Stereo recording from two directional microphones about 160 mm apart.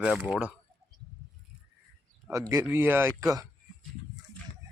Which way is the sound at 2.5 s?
15° right (ahead or behind).